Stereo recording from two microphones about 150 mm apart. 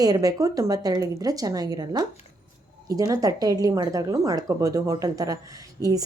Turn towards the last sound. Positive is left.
turn(degrees=-25)  # may be behind; listen again after turning